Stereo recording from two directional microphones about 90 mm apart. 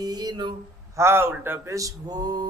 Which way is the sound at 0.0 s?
45° right (ahead or behind).